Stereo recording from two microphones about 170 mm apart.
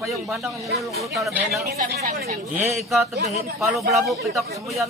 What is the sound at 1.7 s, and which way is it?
Speech, 70° right (ahead or behind).